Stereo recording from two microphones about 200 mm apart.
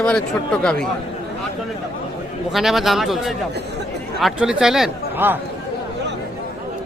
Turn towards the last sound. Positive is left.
turn(degrees=-5)  # may be behind; listen again after turning